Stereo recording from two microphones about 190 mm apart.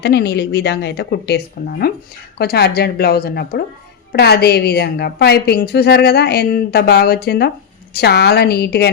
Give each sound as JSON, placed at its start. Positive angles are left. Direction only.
{"t": 0.0, "sound": "a woman's voice", "side_deg": 60}